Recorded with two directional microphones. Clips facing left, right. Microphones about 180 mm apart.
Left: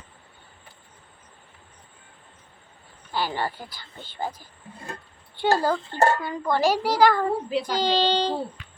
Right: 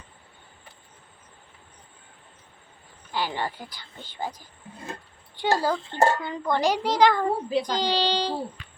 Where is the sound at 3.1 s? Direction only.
15° right (ahead or behind).